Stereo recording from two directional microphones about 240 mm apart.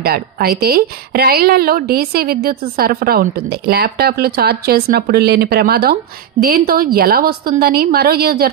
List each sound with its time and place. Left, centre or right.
0.0 s speech: right